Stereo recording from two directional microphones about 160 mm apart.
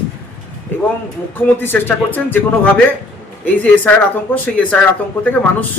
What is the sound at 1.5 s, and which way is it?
Speech, 15° left (ahead or behind).